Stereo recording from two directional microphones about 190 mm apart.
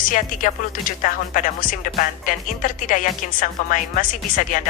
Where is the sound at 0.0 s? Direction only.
45° left (ahead or behind).